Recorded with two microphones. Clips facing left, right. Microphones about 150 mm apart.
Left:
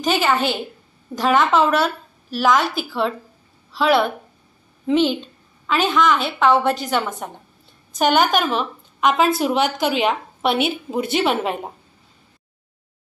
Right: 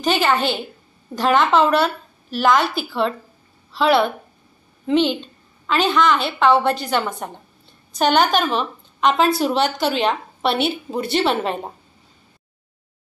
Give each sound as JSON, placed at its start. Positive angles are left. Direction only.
{"t": 0.0, "sound": "a woman's voice", "side_deg": 0}